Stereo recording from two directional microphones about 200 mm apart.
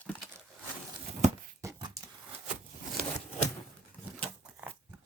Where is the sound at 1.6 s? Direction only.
15° right (ahead or behind).